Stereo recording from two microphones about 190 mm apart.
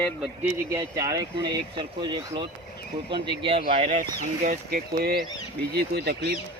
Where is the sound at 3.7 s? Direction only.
40° right (ahead or behind); by 6.1 s 55° right (ahead or behind).